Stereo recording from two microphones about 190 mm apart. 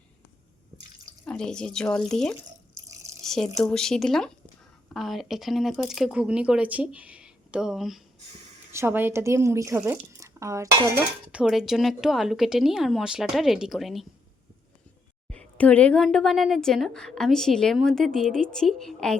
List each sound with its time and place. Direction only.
1.3 s a woman's voice: 5° left (ahead or behind)
8.7 s speech: 10° right (ahead or behind)
11.3 s a woman's voice: 5° right (ahead or behind)
15.3 s a woman's voice: 5° left (ahead or behind)